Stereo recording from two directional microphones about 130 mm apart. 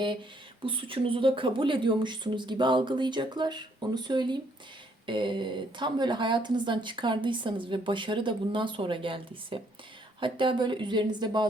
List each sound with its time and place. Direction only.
0.6 s a woman's voice: 40° right (ahead or behind)